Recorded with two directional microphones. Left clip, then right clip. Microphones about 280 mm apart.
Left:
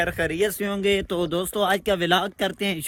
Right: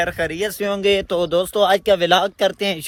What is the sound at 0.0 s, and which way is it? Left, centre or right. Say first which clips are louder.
Speech: right 2 dB; centre.